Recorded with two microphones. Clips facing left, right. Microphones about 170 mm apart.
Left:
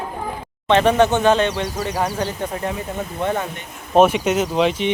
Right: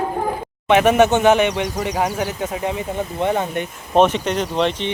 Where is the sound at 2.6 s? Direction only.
20° right (ahead or behind).